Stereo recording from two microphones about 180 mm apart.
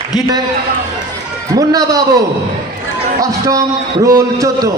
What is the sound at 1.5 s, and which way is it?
Speech, 20° right (ahead or behind).